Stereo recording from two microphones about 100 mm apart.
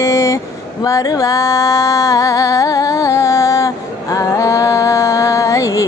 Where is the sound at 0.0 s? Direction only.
30° left (ahead or behind).